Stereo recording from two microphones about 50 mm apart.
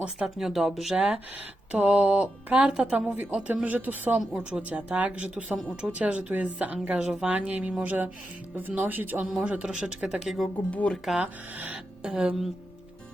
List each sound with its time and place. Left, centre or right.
0.3 s speech: centre
0.9 s speech: right
2.9 s speech: right
4.4 s a woman's voice: centre
4.7 s speech: right
9.3 s speech: right
10.2 s speech: centre
10.7 s speech: left
10.9 s speech: centre
11.2 s speech: right
12.0 s speech: centre